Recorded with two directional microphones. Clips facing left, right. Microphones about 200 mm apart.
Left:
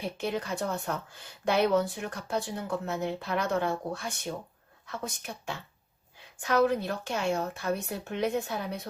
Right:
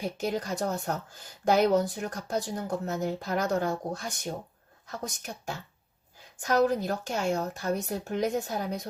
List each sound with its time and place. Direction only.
0.2 s speech: 40° right (ahead or behind)